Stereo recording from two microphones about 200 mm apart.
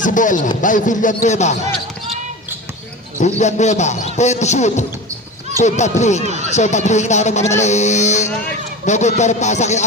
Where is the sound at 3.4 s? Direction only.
35° left (ahead or behind).